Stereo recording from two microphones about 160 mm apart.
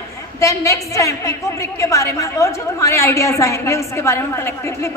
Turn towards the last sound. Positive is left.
turn(degrees=15)  # may be behind; listen again after turning